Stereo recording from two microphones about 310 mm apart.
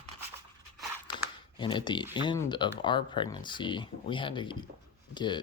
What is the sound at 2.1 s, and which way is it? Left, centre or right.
Speech, centre.